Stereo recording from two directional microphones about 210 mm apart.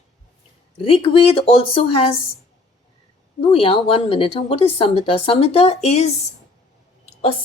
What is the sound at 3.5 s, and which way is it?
Speech, 25° left (ahead or behind).